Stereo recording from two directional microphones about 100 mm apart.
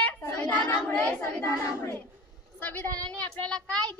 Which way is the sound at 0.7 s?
25° left (ahead or behind).